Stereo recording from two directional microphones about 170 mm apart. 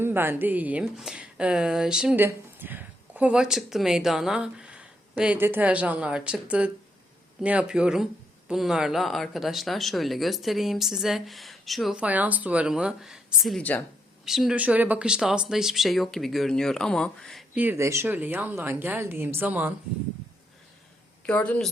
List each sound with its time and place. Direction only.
0.0 s speech: 15° right (ahead or behind); by 13.8 s 10° left (ahead or behind)
14.3 s speech: centre (ahead or behind)
17.5 s speech: 10° right (ahead or behind)
21.2 s speech: 10° left (ahead or behind)